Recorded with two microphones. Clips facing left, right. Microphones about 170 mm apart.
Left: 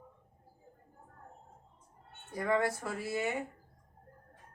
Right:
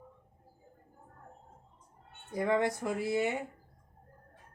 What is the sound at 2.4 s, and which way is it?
Speech, 20° right (ahead or behind).